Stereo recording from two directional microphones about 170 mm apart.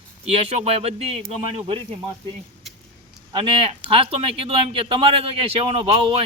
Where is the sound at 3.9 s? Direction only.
35° right (ahead or behind).